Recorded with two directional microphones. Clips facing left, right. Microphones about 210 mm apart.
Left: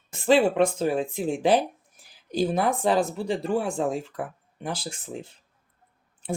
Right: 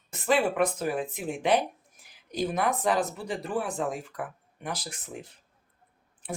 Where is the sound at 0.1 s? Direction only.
30° left (ahead or behind).